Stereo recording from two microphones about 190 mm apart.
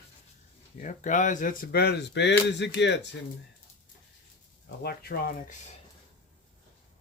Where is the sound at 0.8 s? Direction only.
40° left (ahead or behind); by 3.0 s 65° left (ahead or behind).